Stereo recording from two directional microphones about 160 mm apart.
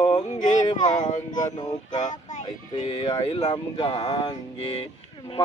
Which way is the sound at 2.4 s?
35° left (ahead or behind).